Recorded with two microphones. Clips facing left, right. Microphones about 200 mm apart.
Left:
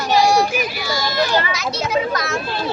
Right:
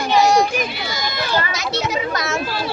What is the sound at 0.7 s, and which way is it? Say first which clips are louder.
Speech: left 3 dB; 20° right (ahead or behind).